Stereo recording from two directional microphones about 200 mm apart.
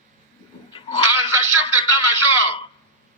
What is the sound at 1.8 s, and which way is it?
Radio, 25° left (ahead or behind).